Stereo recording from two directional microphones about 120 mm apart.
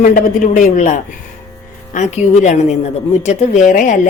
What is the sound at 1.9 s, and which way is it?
A woman's voice, 80° left.